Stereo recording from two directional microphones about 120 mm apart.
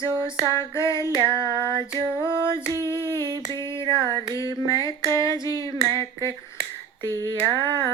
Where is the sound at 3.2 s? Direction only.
35° right (ahead or behind).